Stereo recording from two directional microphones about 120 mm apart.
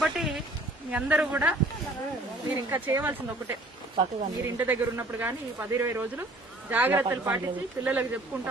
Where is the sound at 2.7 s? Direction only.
20° right (ahead or behind).